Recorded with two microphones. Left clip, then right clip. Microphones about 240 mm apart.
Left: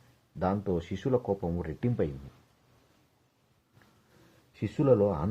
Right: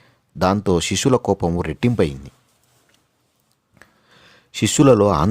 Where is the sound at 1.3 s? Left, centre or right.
Right.